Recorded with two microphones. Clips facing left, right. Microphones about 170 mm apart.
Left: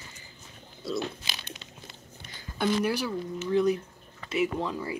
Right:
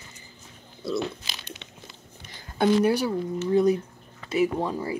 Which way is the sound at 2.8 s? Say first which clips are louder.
Right 6 dB; 35° right (ahead or behind).